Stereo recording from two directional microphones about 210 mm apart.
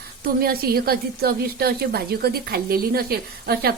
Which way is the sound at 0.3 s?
45° right (ahead or behind).